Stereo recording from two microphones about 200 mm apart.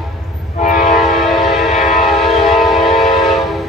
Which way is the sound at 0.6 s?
40° left (ahead or behind).